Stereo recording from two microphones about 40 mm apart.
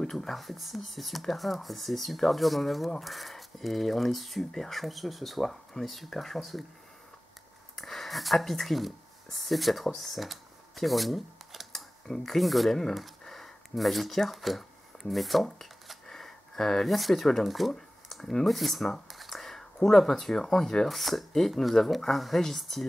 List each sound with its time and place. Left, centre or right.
0.0 s speech: centre
7.7 s speech: centre